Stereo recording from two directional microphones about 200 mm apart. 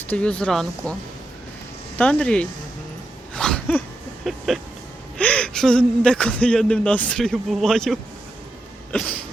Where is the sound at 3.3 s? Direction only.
5° left (ahead or behind).